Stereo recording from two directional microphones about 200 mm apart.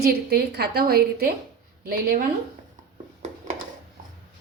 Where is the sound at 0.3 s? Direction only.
55° right (ahead or behind).